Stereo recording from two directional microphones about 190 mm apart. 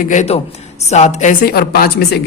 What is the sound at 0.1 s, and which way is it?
A man's voice, 40° left (ahead or behind).